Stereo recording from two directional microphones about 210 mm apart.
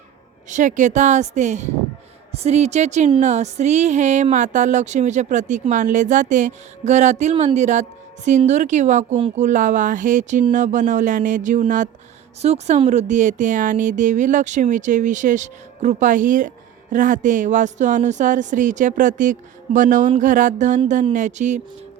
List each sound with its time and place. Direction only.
0.5 s speech: 35° right (ahead or behind)